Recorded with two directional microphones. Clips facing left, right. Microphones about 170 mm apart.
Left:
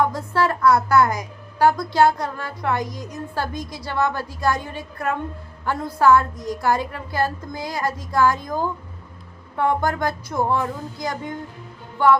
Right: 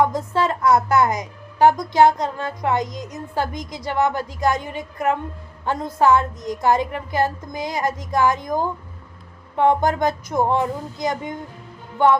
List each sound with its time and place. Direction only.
0.0 s a woman's voice: 20° right (ahead or behind)